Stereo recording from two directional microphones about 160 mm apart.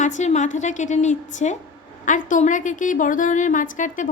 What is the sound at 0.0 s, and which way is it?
A woman's voice, 50° left (ahead or behind).